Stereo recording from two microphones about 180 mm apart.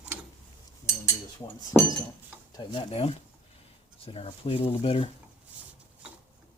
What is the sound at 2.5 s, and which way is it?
Speech, 30° left (ahead or behind).